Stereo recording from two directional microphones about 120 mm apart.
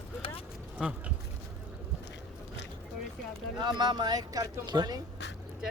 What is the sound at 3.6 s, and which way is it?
Speech, 40° right (ahead or behind).